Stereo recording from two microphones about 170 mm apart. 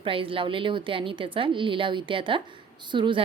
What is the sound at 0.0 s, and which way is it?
A woman's voice, 30° right (ahead or behind).